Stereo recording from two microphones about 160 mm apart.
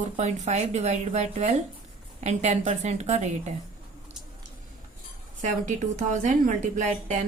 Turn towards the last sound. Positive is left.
turn(degrees=-45)  # may be behind; listen again after turning